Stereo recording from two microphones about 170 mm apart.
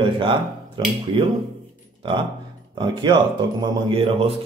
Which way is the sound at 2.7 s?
25° right (ahead or behind).